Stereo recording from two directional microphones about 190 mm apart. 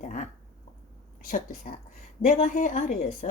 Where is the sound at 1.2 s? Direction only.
45° left (ahead or behind).